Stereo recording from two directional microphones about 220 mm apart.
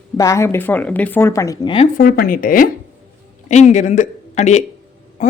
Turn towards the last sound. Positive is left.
turn(degrees=35)  # may be behind; listen again after turning